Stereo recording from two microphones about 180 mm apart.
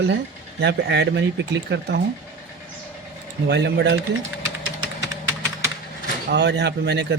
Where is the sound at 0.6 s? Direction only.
75° right (ahead or behind).